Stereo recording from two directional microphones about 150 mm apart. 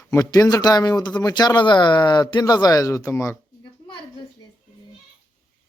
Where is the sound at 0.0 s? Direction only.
20° left (ahead or behind).